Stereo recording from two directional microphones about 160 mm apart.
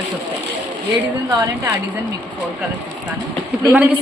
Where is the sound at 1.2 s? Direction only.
20° right (ahead or behind).